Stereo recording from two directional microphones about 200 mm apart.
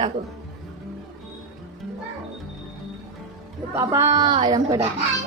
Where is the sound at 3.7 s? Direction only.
15° right (ahead or behind).